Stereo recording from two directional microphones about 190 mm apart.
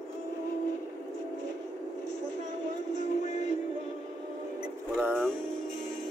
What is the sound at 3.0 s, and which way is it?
Music, 40° left (ahead or behind).